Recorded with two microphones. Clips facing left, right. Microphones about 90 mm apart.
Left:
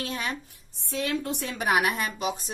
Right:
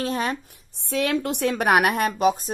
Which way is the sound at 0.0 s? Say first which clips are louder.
Right 7 dB; 40° right (ahead or behind).